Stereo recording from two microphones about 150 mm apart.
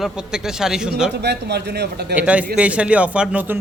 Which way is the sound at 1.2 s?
90° right.